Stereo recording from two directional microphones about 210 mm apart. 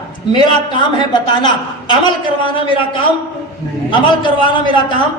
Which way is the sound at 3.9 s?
20° left (ahead or behind).